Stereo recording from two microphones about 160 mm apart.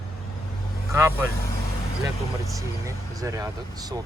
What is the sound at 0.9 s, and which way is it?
Speech, 20° right (ahead or behind).